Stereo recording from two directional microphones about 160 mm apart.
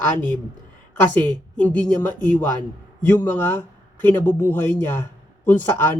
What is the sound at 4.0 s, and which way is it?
A man's voice, 10° left (ahead or behind).